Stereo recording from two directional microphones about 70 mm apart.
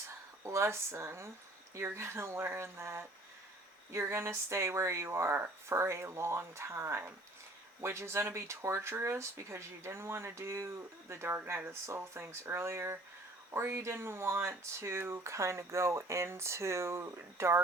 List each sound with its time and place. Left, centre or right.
0.4 s speech: right